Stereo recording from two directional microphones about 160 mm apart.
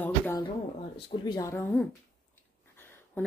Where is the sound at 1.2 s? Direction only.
20° left (ahead or behind).